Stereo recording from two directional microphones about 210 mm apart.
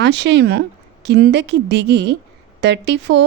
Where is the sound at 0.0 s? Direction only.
55° right (ahead or behind).